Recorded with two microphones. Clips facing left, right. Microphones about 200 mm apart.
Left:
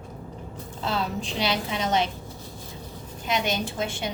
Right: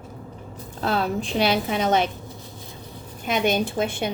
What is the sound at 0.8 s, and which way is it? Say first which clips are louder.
A woman's voice: right 5 dB; 55° right (ahead or behind).